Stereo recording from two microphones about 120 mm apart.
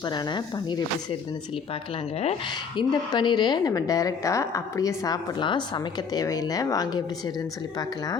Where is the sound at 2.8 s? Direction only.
40° left (ahead or behind).